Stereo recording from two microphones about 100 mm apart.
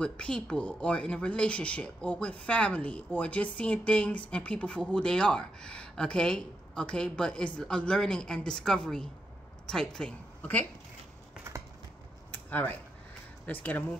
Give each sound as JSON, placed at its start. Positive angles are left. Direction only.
{"t": 0.0, "sound": "a woman's voice", "side_deg": 10}
{"t": 12.4, "sound": "speech", "side_deg": 15}